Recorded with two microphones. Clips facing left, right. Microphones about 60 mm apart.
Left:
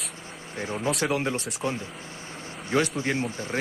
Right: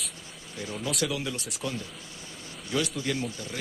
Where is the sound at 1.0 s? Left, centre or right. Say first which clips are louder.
Left 5 dB; left.